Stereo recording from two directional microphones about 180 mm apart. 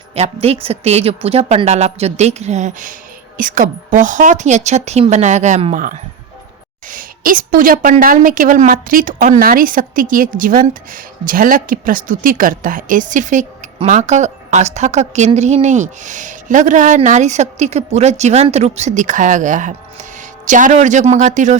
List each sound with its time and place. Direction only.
0.1 s a woman's voice: 35° right (ahead or behind)